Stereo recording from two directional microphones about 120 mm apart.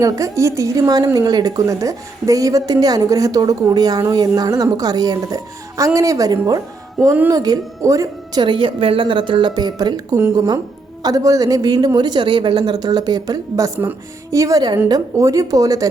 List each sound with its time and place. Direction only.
0.0 s a woman's voice: 25° right (ahead or behind)
8.4 s a woman's voice: 40° right (ahead or behind)